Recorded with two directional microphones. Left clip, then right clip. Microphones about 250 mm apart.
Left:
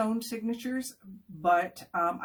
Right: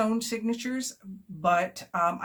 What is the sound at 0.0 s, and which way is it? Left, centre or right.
Speech, right.